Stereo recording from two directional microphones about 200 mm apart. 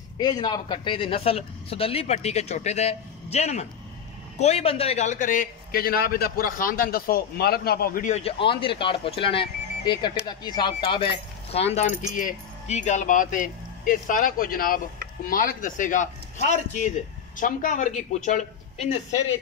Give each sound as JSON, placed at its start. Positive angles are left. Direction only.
{"t": 0.2, "sound": "a man's voice", "side_deg": 20}